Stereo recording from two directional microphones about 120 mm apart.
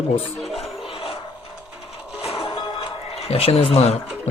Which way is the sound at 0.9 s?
50° left (ahead or behind).